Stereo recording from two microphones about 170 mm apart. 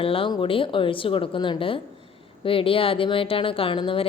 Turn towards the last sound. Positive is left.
turn(degrees=30)  # may be behind; listen again after turning